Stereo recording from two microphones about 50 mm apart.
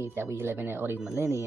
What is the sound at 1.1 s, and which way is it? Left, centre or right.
Speech, right.